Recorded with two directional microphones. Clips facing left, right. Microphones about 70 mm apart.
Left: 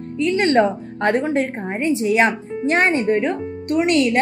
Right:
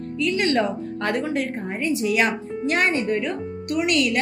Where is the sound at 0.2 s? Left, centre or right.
Left.